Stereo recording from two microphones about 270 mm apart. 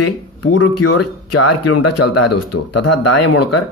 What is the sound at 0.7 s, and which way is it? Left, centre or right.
Speech, left.